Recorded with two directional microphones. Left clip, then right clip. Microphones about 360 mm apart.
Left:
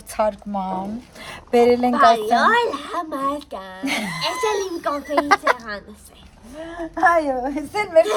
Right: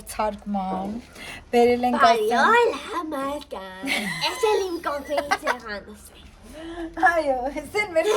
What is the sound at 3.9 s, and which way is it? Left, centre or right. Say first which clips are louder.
A woman's voice: left 2 dB; centre.